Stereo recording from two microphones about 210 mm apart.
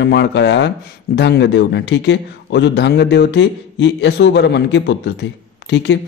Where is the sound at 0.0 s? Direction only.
55° left (ahead or behind).